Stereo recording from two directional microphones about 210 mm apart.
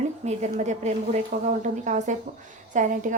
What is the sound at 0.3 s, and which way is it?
A woman's voice, 35° right (ahead or behind).